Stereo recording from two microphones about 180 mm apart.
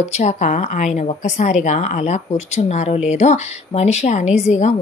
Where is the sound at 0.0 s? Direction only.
40° left (ahead or behind).